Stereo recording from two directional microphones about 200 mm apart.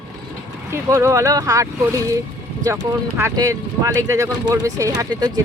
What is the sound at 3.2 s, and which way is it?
Speech, 15° right (ahead or behind).